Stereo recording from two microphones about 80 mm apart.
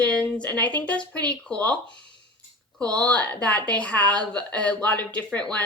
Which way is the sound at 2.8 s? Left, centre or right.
Centre.